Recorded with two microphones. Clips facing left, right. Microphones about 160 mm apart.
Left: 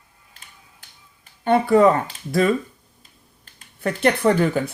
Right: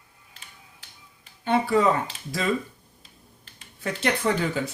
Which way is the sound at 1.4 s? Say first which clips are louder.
Left 6 dB; 55° left (ahead or behind).